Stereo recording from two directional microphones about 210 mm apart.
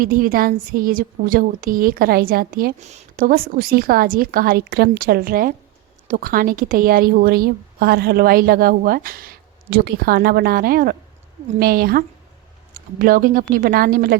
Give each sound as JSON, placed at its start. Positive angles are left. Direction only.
{"t": 0.0, "sound": "a woman's voice", "side_deg": -40}